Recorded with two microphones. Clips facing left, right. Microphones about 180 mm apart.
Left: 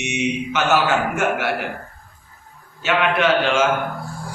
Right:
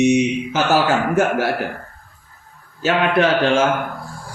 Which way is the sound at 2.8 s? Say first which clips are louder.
Right 2 dB; 35° right (ahead or behind).